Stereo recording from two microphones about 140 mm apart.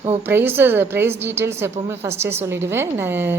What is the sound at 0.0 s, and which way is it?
A woman's voice, 15° right (ahead or behind).